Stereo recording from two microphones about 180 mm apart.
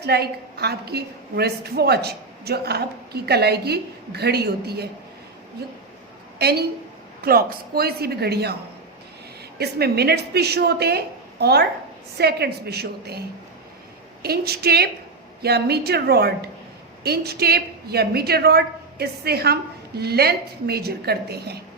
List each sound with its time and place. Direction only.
0.0 s a woman's voice: 65° right (ahead or behind)
9.6 s a woman's voice: 65° right (ahead or behind)